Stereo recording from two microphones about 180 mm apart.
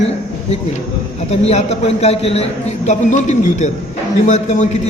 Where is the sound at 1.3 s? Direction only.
35° left (ahead or behind).